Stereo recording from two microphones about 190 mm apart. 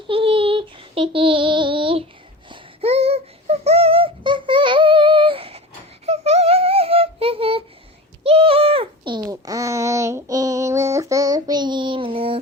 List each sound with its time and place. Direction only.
0.1 s child singing: 30° right (ahead or behind)
2.5 s a sound: 30° right (ahead or behind)
8.2 s bird: 30° right (ahead or behind)
9.2 s child singing: 20° right (ahead or behind)